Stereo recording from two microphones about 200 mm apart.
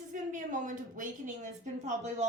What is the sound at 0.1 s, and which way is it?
A woman's voice, 40° right (ahead or behind).